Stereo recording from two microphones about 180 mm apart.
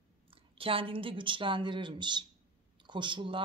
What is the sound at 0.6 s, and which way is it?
Speech, 30° right (ahead or behind).